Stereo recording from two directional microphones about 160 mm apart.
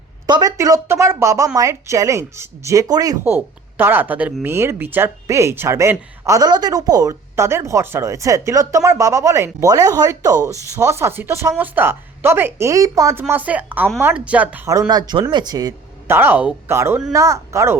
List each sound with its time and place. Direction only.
0.3 s a woman's voice: 25° right (ahead or behind)